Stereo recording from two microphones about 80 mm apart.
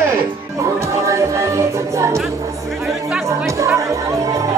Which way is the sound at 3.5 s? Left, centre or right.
Right.